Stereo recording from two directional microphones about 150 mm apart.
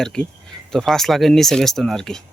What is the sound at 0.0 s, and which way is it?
Speech, 5° left (ahead or behind).